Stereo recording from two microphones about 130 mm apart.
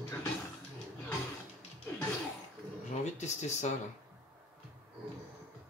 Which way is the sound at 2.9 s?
60° left (ahead or behind).